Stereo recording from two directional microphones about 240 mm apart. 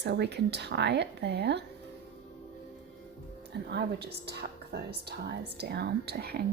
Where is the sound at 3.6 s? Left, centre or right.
Right.